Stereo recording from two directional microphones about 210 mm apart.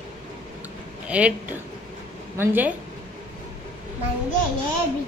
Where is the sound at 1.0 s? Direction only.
5° right (ahead or behind).